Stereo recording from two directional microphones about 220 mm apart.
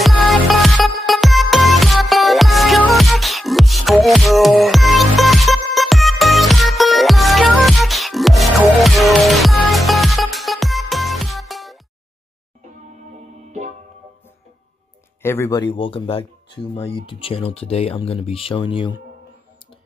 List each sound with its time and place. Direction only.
0.0 s music: centre (ahead or behind)
12.9 s music: 30° right (ahead or behind)
15.2 s speech: 10° left (ahead or behind)